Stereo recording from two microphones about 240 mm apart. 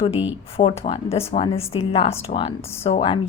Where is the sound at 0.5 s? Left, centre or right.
Left.